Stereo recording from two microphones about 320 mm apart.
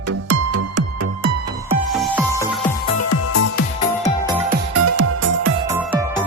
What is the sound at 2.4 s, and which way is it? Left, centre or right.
Music, centre.